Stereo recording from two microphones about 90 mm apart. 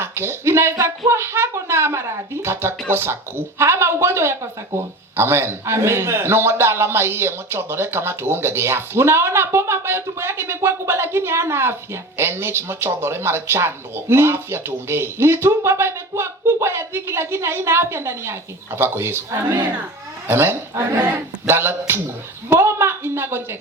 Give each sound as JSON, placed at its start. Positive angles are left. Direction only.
{"t": 0.0, "sound": "a man's voice", "side_deg": -30}